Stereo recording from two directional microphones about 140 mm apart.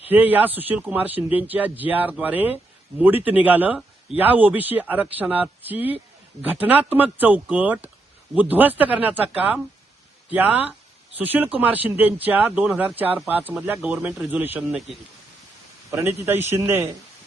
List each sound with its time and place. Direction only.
0.1 s speech: 10° right (ahead or behind)
15.9 s speech: 20° right (ahead or behind)